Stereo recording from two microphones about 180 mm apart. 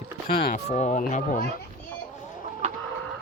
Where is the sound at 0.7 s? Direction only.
40° left (ahead or behind).